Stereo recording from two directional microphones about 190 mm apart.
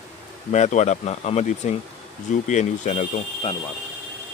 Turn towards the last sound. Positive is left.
turn(degrees=35)  # may be behind; listen again after turning